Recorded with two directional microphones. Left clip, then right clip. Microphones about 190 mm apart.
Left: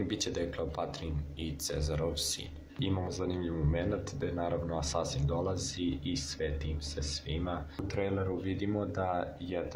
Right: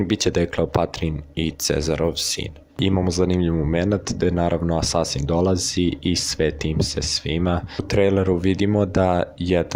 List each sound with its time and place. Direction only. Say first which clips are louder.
0.1 s speech: right 14 dB; 45° right (ahead or behind)